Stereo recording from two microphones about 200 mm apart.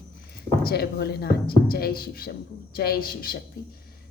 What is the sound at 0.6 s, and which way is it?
Speech, 50° left (ahead or behind).